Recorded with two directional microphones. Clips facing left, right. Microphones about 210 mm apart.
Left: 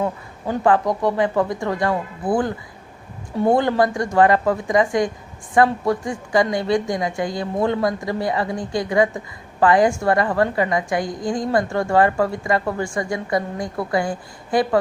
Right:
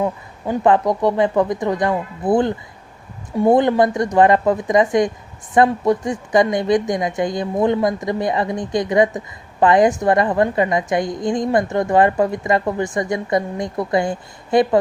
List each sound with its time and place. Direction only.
0.4 s speech: 20° right (ahead or behind)